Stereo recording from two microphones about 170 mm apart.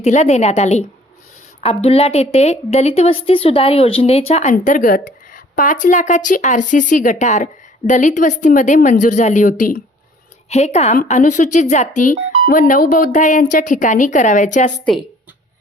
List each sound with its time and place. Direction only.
0.0 s a woman's voice: 45° left (ahead or behind)
4.5 s a woman's voice: 50° left (ahead or behind)